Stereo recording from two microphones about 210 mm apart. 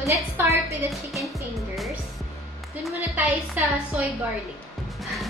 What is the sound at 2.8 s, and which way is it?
A woman's voice, 10° right (ahead or behind).